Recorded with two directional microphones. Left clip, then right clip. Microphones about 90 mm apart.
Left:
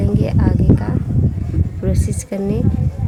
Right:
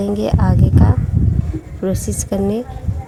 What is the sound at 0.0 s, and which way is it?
A woman's voice, 30° right (ahead or behind).